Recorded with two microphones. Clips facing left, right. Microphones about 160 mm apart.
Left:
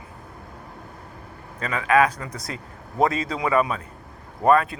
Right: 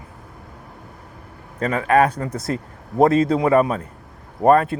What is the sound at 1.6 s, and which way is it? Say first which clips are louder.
A man's voice: right 3 dB; 45° right (ahead or behind).